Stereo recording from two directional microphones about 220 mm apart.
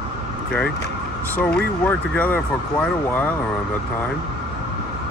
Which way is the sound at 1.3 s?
5° left (ahead or behind).